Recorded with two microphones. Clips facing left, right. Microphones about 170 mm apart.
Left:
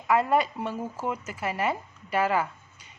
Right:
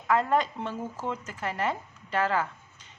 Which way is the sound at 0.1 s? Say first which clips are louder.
Left 2 dB; 10° left (ahead or behind).